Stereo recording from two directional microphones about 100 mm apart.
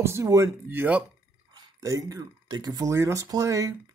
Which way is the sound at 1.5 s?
35° right (ahead or behind).